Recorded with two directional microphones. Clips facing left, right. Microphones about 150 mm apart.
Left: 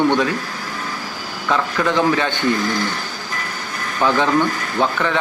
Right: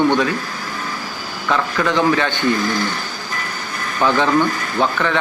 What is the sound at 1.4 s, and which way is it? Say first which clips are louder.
Speech: even; 15° left (ahead or behind).